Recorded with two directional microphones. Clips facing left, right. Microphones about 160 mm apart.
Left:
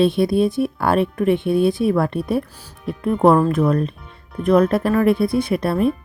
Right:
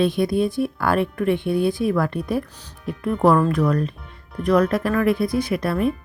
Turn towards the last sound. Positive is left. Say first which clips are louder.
# left 3 dB
turn(degrees=30)  # may be behind; listen again after turning